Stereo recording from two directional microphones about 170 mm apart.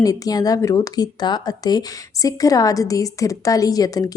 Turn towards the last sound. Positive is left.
turn(degrees=20)  # may be behind; listen again after turning